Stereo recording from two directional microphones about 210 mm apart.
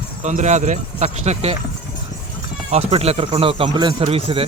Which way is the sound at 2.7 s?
30° right (ahead or behind).